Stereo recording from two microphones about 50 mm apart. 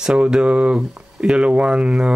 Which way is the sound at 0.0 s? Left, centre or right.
Centre.